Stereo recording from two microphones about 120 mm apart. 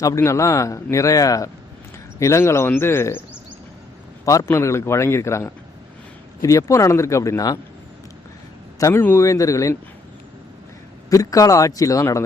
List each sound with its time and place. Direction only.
0.0 s speech: 25° left (ahead or behind)
4.4 s speech: 25° left (ahead or behind)
8.8 s speech: 20° left (ahead or behind)
11.1 s speech: 30° left (ahead or behind)